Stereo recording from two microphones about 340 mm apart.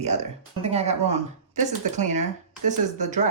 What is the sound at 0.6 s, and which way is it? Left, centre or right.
Speech, centre.